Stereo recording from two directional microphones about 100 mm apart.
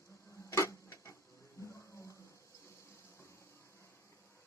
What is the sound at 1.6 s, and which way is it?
Music, 30° left (ahead or behind).